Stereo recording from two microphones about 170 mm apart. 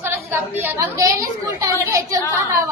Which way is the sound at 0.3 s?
10° right (ahead or behind).